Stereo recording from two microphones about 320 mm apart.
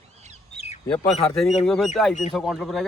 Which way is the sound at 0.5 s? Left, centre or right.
Left.